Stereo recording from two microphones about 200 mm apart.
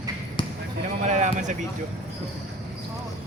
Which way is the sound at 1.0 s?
35° right (ahead or behind).